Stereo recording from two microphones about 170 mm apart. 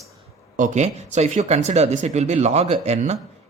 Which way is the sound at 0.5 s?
45° right (ahead or behind).